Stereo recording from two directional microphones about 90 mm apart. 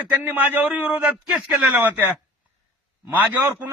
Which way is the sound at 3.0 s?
20° right (ahead or behind).